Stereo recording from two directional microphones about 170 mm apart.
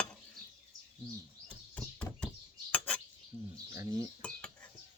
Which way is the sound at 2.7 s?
10° left (ahead or behind).